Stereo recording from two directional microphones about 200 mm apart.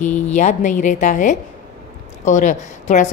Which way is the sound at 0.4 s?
40° left (ahead or behind).